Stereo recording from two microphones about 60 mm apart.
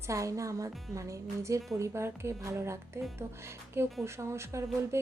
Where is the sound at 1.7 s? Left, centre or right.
Right.